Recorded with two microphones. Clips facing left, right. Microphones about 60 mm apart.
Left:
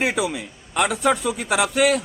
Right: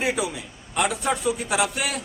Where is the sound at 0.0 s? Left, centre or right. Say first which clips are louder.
Left 3 dB; left.